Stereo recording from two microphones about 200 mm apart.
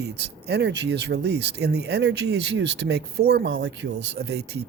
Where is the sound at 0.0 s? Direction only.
55° right (ahead or behind).